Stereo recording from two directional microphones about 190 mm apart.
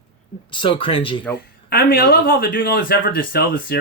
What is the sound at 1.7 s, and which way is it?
Speech, 50° left (ahead or behind).